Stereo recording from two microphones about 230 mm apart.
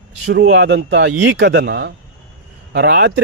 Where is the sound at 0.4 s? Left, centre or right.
Right.